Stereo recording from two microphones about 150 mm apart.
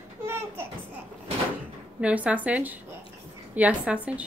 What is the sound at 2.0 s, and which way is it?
Speech, 10° right (ahead or behind).